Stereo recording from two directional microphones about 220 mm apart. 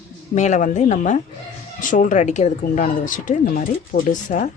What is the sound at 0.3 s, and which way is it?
Speech, 35° left (ahead or behind).